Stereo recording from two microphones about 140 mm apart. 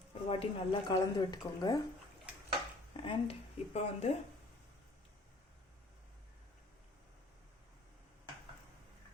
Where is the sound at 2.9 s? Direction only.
40° left (ahead or behind).